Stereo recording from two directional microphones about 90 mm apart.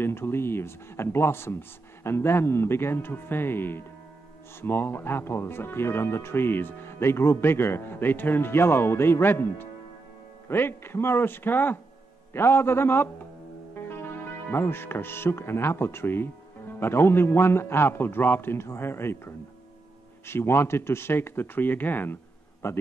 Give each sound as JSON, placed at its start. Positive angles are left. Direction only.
{"t": 0.0, "sound": "speech", "side_deg": 25}
{"t": 14.5, "sound": "speech", "side_deg": 25}